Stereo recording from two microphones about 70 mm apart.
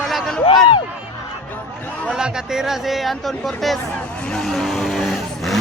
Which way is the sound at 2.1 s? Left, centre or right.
Centre.